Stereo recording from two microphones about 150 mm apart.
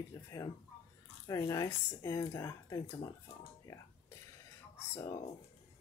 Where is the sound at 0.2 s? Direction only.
15° left (ahead or behind).